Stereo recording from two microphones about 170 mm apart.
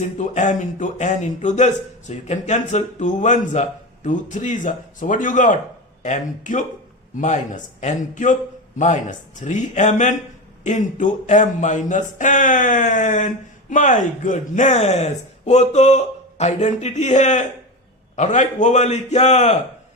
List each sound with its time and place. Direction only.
0.0 s speech: 45° left (ahead or behind)